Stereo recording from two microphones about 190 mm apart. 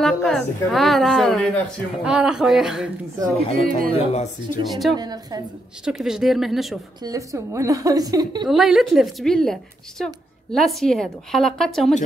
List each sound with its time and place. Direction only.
0.0 s a woman's voice: centre (ahead or behind)
3.3 s speech: 30° left (ahead or behind)
4.6 s a woman's voice: centre (ahead or behind)
4.9 s a woman's voice: 20° right (ahead or behind)
5.9 s a woman's voice: 5° right (ahead or behind)
7.0 s a woman's voice: 20° right (ahead or behind)
8.5 s a woman's voice: centre (ahead or behind)